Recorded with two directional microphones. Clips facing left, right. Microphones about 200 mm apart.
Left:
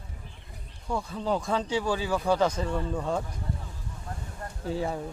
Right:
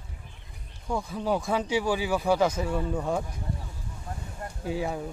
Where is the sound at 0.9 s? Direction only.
10° right (ahead or behind).